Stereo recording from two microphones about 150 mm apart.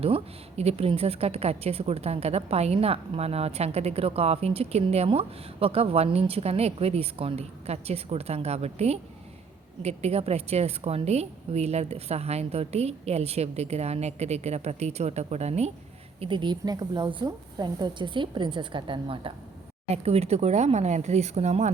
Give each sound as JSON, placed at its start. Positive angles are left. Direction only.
{"t": 0.0, "sound": "a woman's voice", "side_deg": -40}
{"t": 16.2, "sound": "a woman's voice", "side_deg": -30}